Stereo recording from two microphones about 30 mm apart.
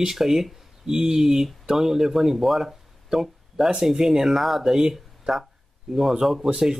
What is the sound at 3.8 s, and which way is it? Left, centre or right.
Speech, centre.